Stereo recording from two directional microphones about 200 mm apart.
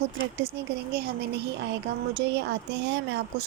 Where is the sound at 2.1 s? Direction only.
60° right (ahead or behind).